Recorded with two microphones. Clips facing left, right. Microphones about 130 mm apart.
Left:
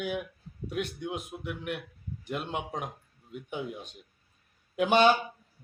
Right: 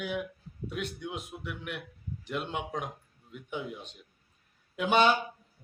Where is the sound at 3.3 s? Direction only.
45° left (ahead or behind).